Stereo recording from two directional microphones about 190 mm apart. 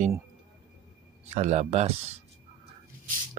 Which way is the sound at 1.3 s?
35° right (ahead or behind).